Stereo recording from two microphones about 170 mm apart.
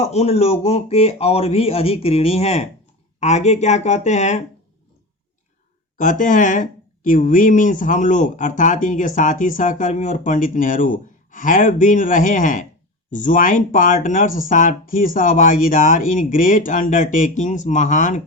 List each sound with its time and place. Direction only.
0.0 s speech: 40° left (ahead or behind)
6.0 s speech: 50° left (ahead or behind)